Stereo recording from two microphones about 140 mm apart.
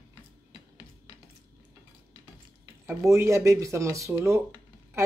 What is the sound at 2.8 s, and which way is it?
Speech, 20° right (ahead or behind).